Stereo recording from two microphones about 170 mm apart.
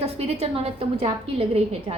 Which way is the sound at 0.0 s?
35° right (ahead or behind).